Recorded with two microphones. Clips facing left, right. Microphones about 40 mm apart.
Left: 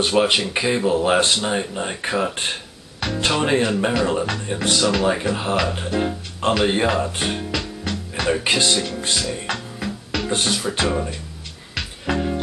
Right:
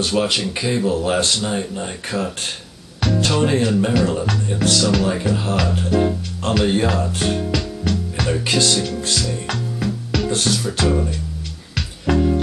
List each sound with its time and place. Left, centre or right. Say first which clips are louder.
0.0 s speech: left 2 dB; left
11.7 s music: right 4 dB; centre